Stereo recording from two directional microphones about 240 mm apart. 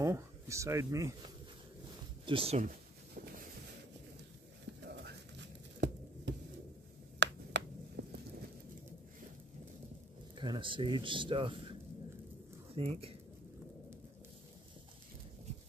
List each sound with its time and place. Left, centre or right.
0.0 s speech: centre
2.2 s speech: right
4.8 s a sound: right
10.3 s speech: centre
12.7 s speech: right